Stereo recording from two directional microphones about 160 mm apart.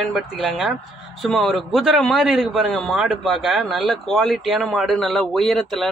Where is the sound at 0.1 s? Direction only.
Centre (ahead or behind).